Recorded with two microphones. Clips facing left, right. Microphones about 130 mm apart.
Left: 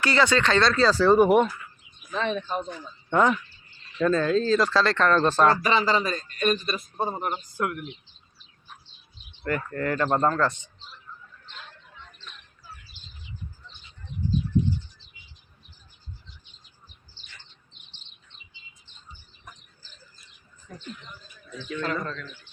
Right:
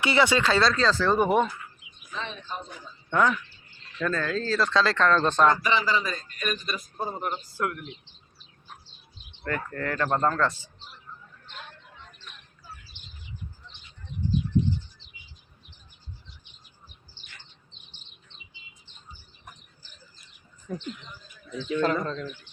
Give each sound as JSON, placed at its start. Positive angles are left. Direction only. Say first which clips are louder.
{"t": 0.0, "sound": "speech", "louder": "even", "side_deg": -15}
{"t": 0.9, "sound": "speech", "louder": "left 5 dB", "side_deg": 10}
{"t": 2.1, "sound": "speech", "louder": "left 8 dB", "side_deg": 55}
{"t": 3.1, "sound": "speech", "louder": "left 2 dB", "side_deg": 20}
{"t": 4.7, "sound": "speech", "louder": "left 1 dB", "side_deg": 0}
{"t": 5.5, "sound": "a man's voice", "louder": "left 2 dB", "side_deg": 35}
{"t": 9.4, "sound": "speech", "louder": "left 3 dB", "side_deg": 5}
{"t": 13.0, "sound": "bird", "louder": "even", "side_deg": -20}
{"t": 17.2, "sound": "bird", "louder": "left 1 dB", "side_deg": -55}
{"t": 21.8, "sound": "speech", "louder": "right 4 dB", "side_deg": -35}